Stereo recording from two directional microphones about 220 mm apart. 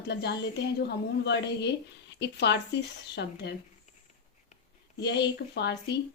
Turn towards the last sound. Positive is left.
turn(degrees=50)  # may be behind; listen again after turning